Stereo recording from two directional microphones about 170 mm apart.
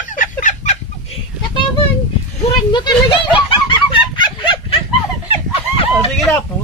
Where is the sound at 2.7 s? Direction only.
25° left (ahead or behind).